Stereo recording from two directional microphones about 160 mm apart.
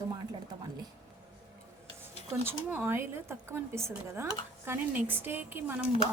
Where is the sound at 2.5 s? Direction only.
10° right (ahead or behind).